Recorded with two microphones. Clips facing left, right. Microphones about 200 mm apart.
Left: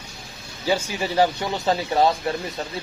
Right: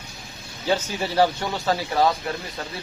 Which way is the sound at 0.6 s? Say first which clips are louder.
Left 1 dB; 10° left (ahead or behind).